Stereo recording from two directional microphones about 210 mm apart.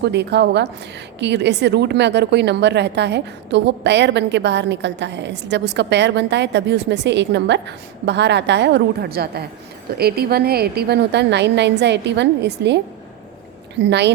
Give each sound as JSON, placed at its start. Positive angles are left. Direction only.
{"t": 0.0, "sound": "a woman's voice", "side_deg": -55}